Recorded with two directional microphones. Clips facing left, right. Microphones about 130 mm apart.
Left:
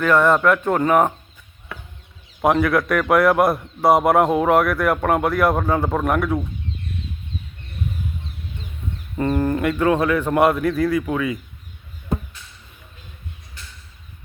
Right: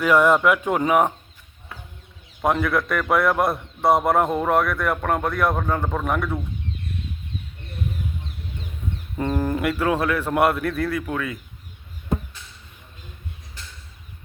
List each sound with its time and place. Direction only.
0.0 s speech: 10° right (ahead or behind)
1.7 s a sound: 75° left (ahead or behind)
2.4 s a man's voice: centre (ahead or behind)
9.1 s a man's voice: centre (ahead or behind)